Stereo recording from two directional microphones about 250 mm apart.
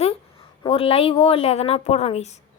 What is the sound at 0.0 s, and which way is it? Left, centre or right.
A woman's voice, left.